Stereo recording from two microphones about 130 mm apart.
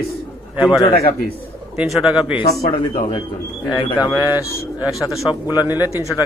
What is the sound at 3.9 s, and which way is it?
Speech, 25° left (ahead or behind).